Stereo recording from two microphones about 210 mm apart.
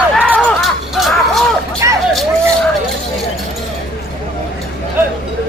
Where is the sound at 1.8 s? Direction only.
15° right (ahead or behind).